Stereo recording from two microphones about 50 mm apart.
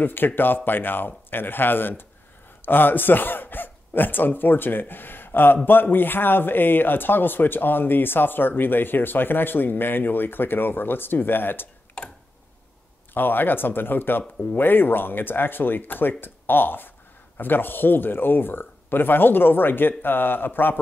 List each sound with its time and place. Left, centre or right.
0.0 s speech: left
13.1 s speech: left